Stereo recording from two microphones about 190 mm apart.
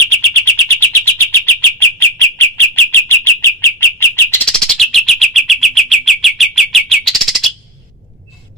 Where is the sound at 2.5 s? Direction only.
10° left (ahead or behind).